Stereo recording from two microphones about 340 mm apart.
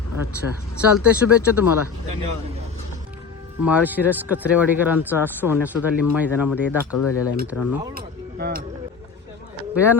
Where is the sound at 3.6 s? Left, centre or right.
Centre.